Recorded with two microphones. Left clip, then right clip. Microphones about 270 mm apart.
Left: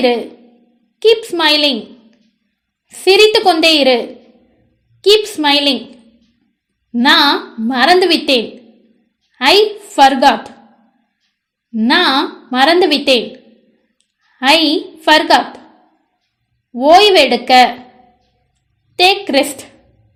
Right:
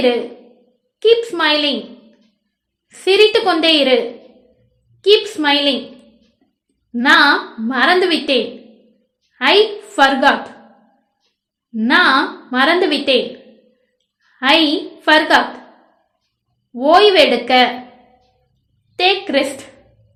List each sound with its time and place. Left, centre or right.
0.9 s a woman's voice: left
5.0 s a woman's voice: left
6.9 s a woman's voice: left
9.4 s a woman's voice: left
11.7 s a woman's voice: left
14.3 s a woman's voice: left
16.7 s a woman's voice: left
18.9 s a woman's voice: left